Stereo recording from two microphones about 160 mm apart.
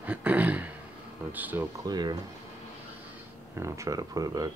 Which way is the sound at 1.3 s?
10° right (ahead or behind).